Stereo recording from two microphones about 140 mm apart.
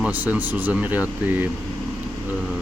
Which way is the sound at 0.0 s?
10° right (ahead or behind).